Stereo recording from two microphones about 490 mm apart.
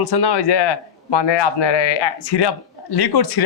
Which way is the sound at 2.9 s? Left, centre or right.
Left.